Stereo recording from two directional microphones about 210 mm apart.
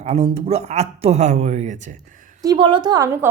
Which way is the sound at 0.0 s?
30° right (ahead or behind).